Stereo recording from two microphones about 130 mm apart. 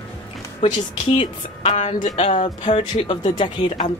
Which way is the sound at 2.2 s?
50° left (ahead or behind).